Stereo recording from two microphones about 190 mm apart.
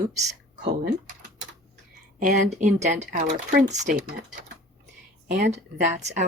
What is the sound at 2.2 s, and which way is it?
Speech, 40° right (ahead or behind).